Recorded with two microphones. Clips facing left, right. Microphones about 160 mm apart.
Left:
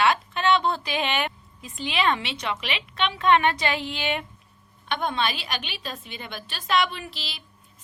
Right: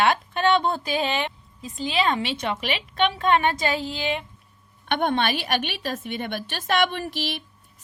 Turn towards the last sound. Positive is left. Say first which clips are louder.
# right 9 dB
turn(degrees=-50)  # may be behind; listen again after turning